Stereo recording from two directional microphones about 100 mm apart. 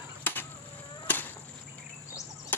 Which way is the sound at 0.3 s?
20° left (ahead or behind).